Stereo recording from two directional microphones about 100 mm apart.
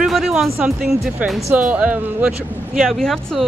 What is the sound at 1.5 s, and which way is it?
Speech, 15° right (ahead or behind).